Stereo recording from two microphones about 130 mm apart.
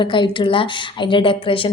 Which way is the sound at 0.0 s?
40° left (ahead or behind).